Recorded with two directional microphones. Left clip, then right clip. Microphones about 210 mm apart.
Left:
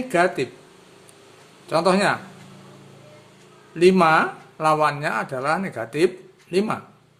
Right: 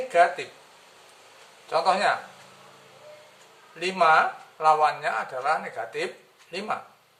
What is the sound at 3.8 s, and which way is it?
Speech, 55° left (ahead or behind).